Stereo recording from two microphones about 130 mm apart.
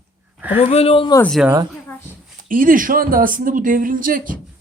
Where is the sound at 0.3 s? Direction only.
15° right (ahead or behind).